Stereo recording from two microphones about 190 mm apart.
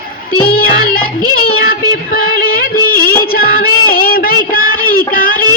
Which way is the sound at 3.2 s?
50° left (ahead or behind).